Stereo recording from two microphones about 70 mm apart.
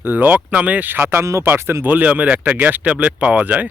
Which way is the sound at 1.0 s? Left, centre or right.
Right.